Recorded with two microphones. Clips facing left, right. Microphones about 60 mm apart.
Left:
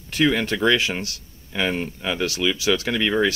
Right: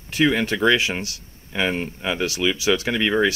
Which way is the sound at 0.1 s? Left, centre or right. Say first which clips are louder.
Right 1 dB; centre.